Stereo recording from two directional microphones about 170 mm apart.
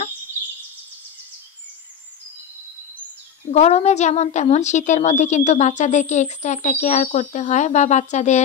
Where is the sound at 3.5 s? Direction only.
40° left (ahead or behind).